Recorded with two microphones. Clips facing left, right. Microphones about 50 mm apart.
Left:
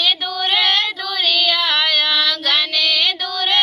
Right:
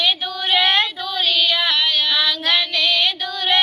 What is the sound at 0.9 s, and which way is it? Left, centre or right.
Child singing, left.